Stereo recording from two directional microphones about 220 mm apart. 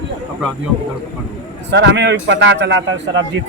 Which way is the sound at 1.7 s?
55° right (ahead or behind).